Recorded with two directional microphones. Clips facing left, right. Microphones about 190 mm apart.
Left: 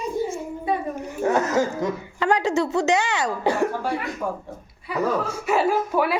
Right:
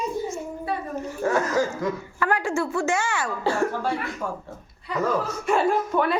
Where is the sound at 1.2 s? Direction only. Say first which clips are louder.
Left 2 dB; 20° left (ahead or behind).